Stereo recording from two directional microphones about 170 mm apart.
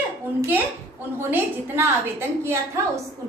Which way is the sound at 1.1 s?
15° right (ahead or behind).